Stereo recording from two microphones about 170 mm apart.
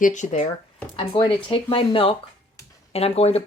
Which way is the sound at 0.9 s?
30° left (ahead or behind).